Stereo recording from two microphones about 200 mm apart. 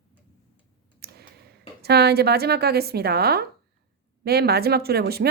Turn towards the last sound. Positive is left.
turn(degrees=-50)  # may be behind; listen again after turning